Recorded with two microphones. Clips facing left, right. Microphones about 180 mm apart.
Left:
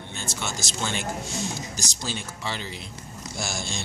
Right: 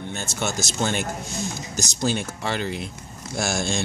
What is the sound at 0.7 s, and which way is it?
Speech, 50° right (ahead or behind).